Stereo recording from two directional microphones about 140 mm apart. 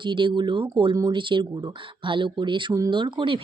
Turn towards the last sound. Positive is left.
turn(degrees=-35)  # may be behind; listen again after turning